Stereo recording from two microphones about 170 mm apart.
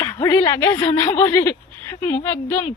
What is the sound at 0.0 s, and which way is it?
Speech, 20° left (ahead or behind).